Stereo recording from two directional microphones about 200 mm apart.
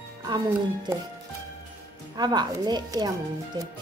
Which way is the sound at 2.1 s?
20° right (ahead or behind).